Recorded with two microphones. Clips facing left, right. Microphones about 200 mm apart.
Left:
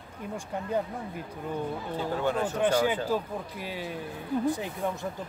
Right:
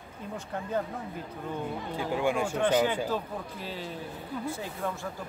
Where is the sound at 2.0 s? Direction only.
10° right (ahead or behind).